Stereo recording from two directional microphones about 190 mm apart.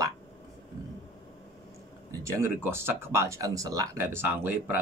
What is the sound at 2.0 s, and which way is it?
Speech, 15° right (ahead or behind).